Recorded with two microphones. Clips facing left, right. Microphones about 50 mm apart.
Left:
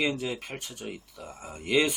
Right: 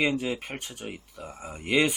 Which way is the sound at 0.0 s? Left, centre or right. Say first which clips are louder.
Right 3 dB; centre.